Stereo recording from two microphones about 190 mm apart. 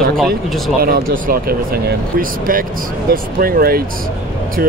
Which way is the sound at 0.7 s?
50° right (ahead or behind).